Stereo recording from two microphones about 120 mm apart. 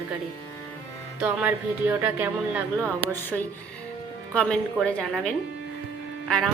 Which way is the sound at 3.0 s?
15° left (ahead or behind).